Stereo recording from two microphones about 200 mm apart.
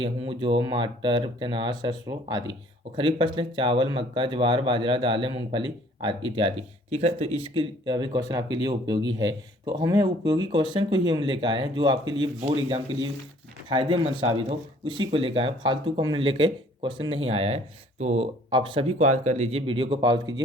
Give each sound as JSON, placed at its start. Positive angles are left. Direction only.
{"t": 0.0, "sound": "speech", "side_deg": -25}
{"t": 7.9, "sound": "speech", "side_deg": -20}